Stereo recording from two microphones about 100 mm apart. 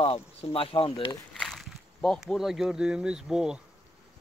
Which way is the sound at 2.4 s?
5° right (ahead or behind).